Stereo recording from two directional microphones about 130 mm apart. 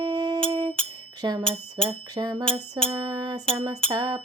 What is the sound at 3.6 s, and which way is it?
Music, 35° right (ahead or behind).